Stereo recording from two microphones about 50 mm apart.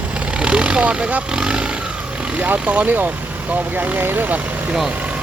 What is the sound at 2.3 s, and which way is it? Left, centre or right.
Speech, right.